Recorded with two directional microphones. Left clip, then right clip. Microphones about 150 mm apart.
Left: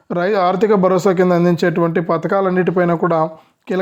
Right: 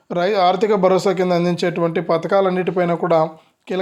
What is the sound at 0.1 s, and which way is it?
Speech, 50° left (ahead or behind).